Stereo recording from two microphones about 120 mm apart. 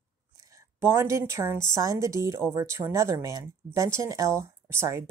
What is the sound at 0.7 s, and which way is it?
Speech, 20° right (ahead or behind).